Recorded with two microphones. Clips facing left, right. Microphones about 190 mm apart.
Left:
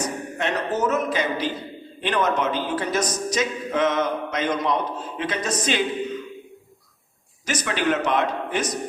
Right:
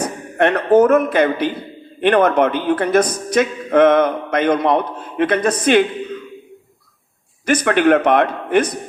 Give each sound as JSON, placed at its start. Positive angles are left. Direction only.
{"t": 0.0, "sound": "a man's voice", "side_deg": -60}
{"t": 7.4, "sound": "a man's voice", "side_deg": -60}